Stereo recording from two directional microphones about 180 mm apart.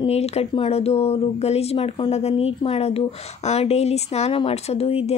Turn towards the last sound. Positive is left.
turn(degrees=35)  # may be behind; listen again after turning